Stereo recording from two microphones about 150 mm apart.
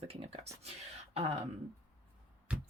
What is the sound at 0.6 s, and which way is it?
Whispering, 45° right (ahead or behind).